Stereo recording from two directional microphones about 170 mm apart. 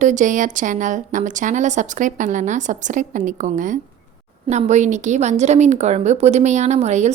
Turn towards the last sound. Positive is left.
turn(degrees=-40)  # may be behind; listen again after turning